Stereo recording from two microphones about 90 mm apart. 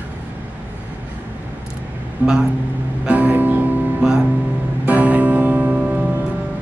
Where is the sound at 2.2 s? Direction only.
20° right (ahead or behind).